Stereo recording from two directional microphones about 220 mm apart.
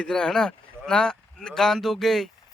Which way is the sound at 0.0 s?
5° left (ahead or behind).